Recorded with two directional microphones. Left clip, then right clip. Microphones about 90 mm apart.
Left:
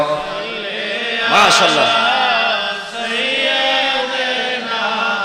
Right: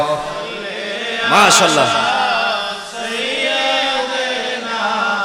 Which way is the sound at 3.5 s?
30° right (ahead or behind).